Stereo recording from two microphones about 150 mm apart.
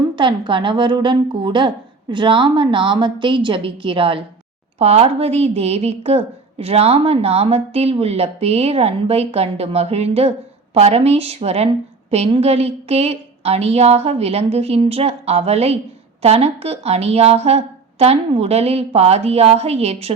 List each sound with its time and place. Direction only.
0.2 s a woman's voice: 35° right (ahead or behind)